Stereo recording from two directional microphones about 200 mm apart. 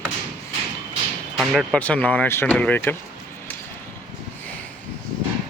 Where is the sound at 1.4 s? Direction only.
Centre (ahead or behind).